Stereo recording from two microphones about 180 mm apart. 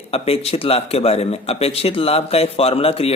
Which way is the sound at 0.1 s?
35° left (ahead or behind).